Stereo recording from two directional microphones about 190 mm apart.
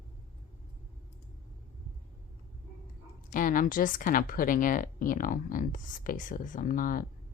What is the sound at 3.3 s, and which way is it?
Speech, 45° left (ahead or behind).